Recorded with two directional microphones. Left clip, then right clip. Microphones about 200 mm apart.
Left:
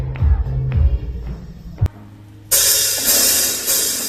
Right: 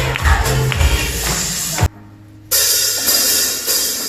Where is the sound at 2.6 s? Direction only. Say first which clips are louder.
Right 1 dB; 40° left (ahead or behind).